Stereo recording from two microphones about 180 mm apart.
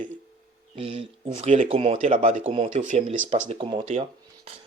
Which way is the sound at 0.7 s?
35° right (ahead or behind).